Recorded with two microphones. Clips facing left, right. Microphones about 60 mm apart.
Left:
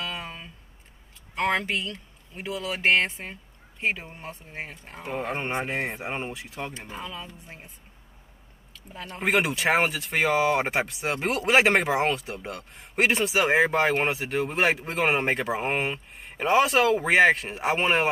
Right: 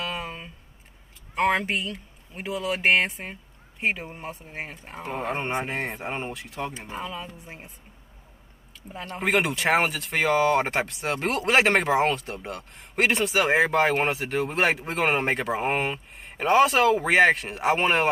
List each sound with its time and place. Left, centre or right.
0.0 s a sound: right
1.3 s speech: centre
5.0 s speech: centre
6.7 s speech: centre
9.2 s speech: centre